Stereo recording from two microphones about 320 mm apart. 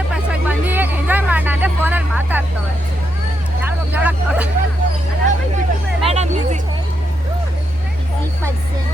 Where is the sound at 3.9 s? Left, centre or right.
Centre.